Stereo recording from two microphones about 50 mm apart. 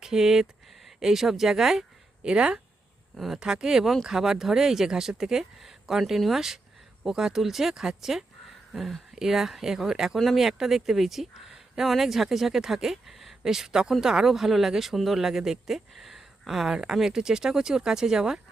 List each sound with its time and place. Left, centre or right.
0.0 s speech: centre
3.2 s speech: centre